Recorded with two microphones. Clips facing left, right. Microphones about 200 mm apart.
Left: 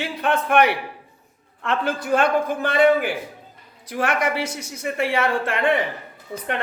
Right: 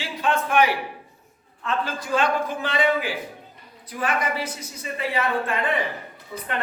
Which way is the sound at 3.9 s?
85° left.